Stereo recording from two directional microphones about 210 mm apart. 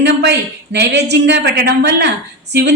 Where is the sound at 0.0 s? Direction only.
55° right (ahead or behind).